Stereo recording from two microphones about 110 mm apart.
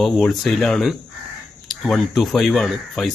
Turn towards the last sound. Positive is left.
turn(degrees=0)  # may be behind; listen again after turning